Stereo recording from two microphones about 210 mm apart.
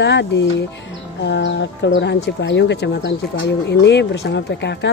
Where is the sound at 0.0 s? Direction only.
55° left (ahead or behind).